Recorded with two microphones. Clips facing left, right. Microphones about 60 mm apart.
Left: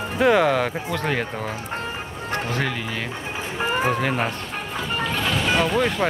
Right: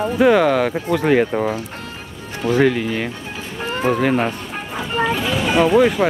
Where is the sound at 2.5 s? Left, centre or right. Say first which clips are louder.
Right 9 dB; centre.